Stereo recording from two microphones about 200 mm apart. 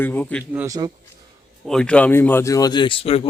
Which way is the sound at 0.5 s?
15° right (ahead or behind).